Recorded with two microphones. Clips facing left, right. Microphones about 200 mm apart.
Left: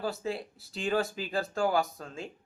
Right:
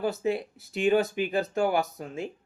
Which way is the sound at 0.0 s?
20° right (ahead or behind).